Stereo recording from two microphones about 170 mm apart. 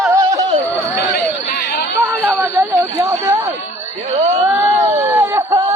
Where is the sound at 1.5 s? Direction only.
70° left (ahead or behind).